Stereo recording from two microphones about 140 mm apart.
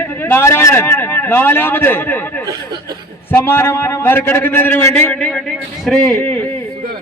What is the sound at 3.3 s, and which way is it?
A man's voice, 15° left (ahead or behind).